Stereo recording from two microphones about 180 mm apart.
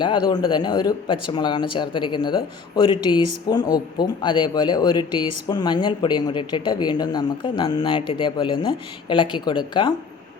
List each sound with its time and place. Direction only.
0.0 s speech: 25° left (ahead or behind)